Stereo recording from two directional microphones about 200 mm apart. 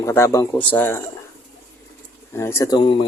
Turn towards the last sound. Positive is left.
turn(degrees=25)  # may be behind; listen again after turning